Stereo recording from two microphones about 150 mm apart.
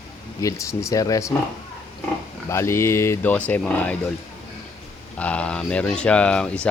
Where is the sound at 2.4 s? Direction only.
20° left (ahead or behind).